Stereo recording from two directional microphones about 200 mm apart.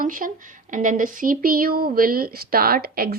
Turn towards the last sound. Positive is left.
turn(degrees=-50)  # may be behind; listen again after turning